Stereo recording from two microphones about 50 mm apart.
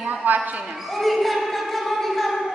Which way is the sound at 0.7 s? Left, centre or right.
Centre.